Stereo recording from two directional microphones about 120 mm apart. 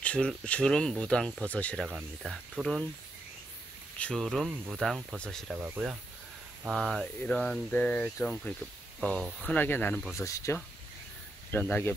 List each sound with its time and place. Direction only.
0.0 s speech: 10° left (ahead or behind)
1.9 s speech: centre (ahead or behind)
4.0 s speech: 5° left (ahead or behind)
4.5 s speech: 10° right (ahead or behind); by 10.0 s 15° left (ahead or behind)
10.1 s speech: 25° left (ahead or behind)